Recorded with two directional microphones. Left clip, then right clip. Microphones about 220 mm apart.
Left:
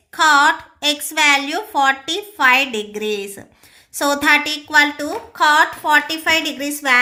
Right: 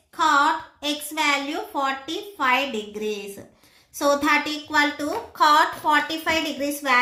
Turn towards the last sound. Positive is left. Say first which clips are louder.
# left 5 dB
turn(degrees=30)  # may be behind; listen again after turning